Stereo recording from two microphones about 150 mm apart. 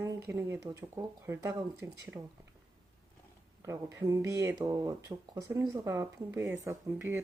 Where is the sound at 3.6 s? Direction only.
20° right (ahead or behind).